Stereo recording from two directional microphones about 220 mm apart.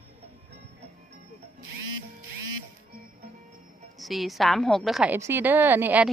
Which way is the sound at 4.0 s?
Centre (ahead or behind).